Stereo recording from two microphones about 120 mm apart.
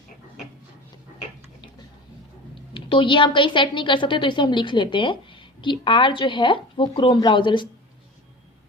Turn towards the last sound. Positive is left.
turn(degrees=40)  # may be behind; listen again after turning